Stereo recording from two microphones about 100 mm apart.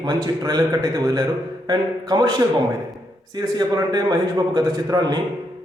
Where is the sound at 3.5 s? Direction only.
45° right (ahead or behind).